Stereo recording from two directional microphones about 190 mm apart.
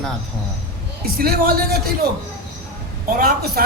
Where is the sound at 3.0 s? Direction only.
50° right (ahead or behind).